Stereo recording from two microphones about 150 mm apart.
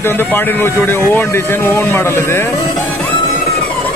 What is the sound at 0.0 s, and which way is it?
Speech, 15° left (ahead or behind).